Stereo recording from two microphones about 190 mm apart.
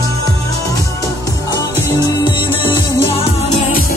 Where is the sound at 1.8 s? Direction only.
25° left (ahead or behind).